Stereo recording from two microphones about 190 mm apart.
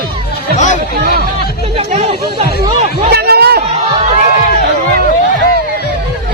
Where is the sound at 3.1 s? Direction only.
55° right (ahead or behind).